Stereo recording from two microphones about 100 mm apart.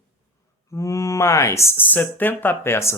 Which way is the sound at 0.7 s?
30° left (ahead or behind).